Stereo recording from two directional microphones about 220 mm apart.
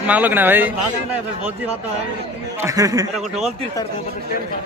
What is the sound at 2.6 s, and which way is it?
Speech, 15° right (ahead or behind).